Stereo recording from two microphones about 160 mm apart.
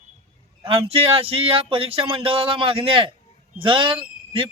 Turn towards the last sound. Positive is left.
turn(degrees=-35)  # may be behind; listen again after turning